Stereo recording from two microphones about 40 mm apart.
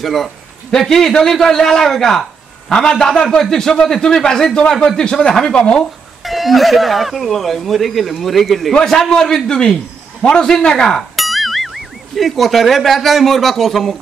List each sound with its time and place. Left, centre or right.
0.0 s a man's voice: centre
2.7 s a man's voice: centre
5.8 s speech: centre
8.7 s a man's voice: centre
11.1 s speech: centre